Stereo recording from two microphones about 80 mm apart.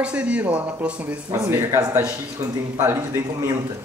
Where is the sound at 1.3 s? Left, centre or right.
Right.